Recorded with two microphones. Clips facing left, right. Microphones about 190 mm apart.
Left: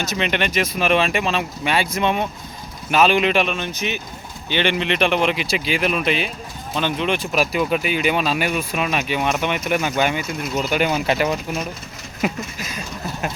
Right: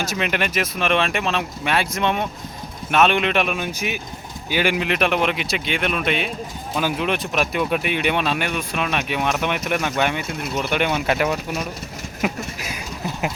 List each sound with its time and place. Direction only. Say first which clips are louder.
0.0 s speech: left 1 dB; 5° right (ahead or behind)
3.5 s speech: even; 10° right (ahead or behind)